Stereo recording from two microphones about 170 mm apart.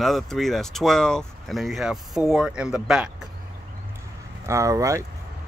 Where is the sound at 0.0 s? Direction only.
Centre (ahead or behind).